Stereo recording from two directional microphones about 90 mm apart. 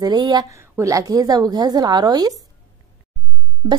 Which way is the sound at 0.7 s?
40° right (ahead or behind).